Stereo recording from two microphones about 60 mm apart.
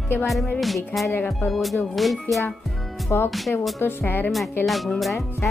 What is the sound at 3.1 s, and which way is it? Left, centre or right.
Speech, left.